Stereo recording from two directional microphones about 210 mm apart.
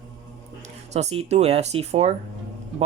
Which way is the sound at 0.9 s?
30° right (ahead or behind).